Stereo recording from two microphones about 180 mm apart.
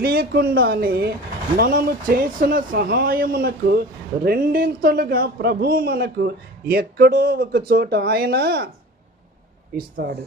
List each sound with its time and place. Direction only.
0.0 s speech: 60° right (ahead or behind)
9.8 s speech: 55° right (ahead or behind)